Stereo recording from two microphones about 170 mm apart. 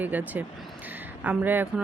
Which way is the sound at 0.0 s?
10° right (ahead or behind).